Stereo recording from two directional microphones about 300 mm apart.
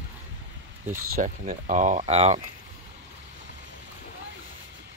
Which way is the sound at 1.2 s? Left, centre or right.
Right.